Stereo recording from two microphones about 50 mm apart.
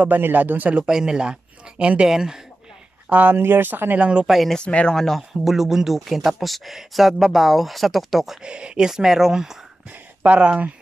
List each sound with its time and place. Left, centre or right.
0.0 s speech: right
0.8 s speech: centre
2.0 s speech: centre
3.1 s speech: right
3.3 s speech: right
4.0 s speech: right
4.3 s speech: centre
4.6 s speech: centre
4.9 s speech: centre
5.4 s speech: centre
8.4 s speech: centre
10.2 s speech: right